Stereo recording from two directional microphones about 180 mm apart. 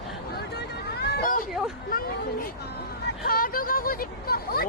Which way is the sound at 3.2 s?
55° left (ahead or behind).